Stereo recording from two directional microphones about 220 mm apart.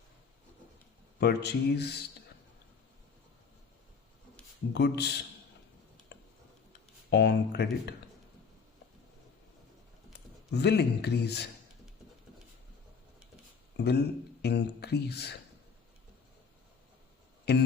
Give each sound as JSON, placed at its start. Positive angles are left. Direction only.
{"t": 1.2, "sound": "speech", "side_deg": 50}
{"t": 4.7, "sound": "speech", "side_deg": 50}
{"t": 6.1, "sound": "tick", "side_deg": 55}
{"t": 7.1, "sound": "speech", "side_deg": 50}
{"t": 10.1, "sound": "speech", "side_deg": 50}
{"t": 13.7, "sound": "speech", "side_deg": 50}
{"t": 17.5, "sound": "a sound", "side_deg": 50}